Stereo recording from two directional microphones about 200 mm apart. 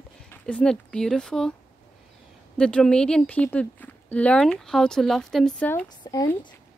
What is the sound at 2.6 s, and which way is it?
Speech, 5° left (ahead or behind).